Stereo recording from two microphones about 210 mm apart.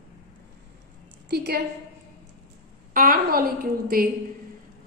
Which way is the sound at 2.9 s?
40° right (ahead or behind).